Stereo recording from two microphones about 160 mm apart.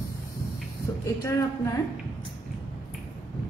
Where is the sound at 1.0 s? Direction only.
20° left (ahead or behind).